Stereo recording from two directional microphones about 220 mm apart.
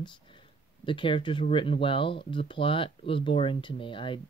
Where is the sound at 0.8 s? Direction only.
25° left (ahead or behind).